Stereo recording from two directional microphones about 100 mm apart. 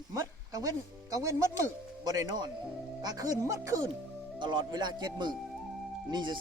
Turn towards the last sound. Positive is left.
turn(degrees=-50)  # may be behind; listen again after turning